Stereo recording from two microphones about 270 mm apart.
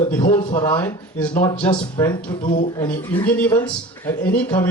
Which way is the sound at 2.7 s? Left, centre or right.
Centre.